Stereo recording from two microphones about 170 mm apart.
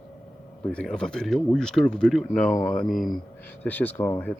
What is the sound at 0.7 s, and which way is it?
Speech, 5° left (ahead or behind).